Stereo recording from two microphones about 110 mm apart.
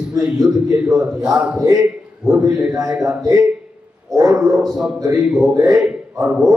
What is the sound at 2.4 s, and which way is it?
Speech, 30° right (ahead or behind).